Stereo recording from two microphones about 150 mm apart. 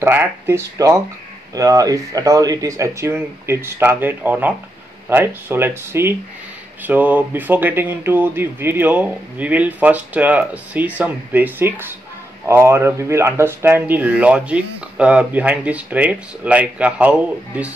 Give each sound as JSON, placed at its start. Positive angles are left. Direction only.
{"t": 0.0, "sound": "speech", "side_deg": -15}